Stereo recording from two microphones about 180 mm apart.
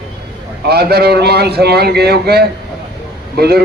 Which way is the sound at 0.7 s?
60° right (ahead or behind).